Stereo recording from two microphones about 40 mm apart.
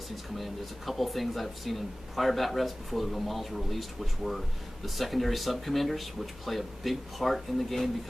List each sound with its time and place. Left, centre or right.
0.4 s speech: centre